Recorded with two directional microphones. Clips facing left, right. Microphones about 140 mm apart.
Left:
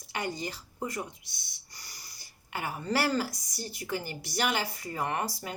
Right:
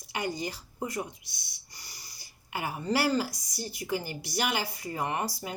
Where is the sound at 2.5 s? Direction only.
10° right (ahead or behind).